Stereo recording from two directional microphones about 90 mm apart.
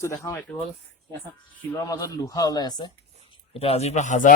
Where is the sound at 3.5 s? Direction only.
90° left.